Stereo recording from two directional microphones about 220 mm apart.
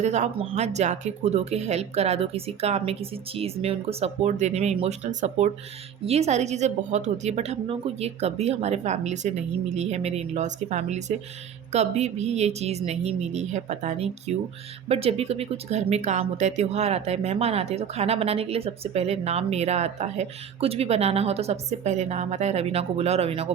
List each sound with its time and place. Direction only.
0.0 s a woman's voice: 30° right (ahead or behind)